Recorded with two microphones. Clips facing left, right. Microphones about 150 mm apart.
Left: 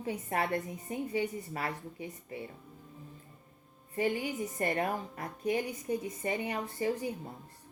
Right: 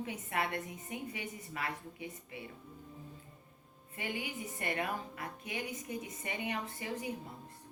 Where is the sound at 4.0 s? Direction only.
40° left (ahead or behind).